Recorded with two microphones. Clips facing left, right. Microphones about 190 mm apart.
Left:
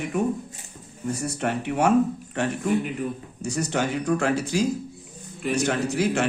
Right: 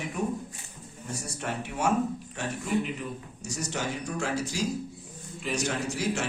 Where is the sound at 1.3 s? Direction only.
65° left (ahead or behind).